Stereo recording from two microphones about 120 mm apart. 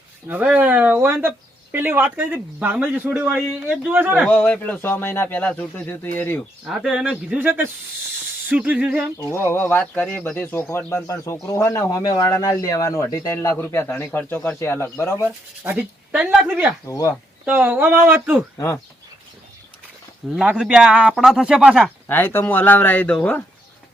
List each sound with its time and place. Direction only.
0.3 s a man's voice: 15° right (ahead or behind)
4.3 s speech: 10° left (ahead or behind)
6.7 s a man's voice: 5° right (ahead or behind)
9.1 s speech: 25° left (ahead or behind)
11.0 s speech: 30° left (ahead or behind)
15.6 s a man's voice: 15° right (ahead or behind)
16.8 s speech: 25° left (ahead or behind)
17.4 s a man's voice: 10° right (ahead or behind)
20.3 s a man's voice: 5° right (ahead or behind)
22.0 s speech: 20° left (ahead or behind)